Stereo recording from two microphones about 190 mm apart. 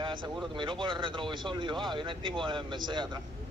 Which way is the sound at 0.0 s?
25° right (ahead or behind).